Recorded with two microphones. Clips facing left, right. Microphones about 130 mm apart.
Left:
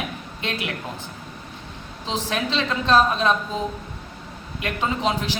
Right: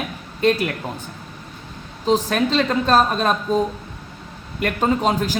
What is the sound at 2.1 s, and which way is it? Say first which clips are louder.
A man's voice: right 7 dB; 45° right (ahead or behind).